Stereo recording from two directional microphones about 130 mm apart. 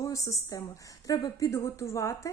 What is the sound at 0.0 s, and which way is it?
A woman's voice, 25° left (ahead or behind).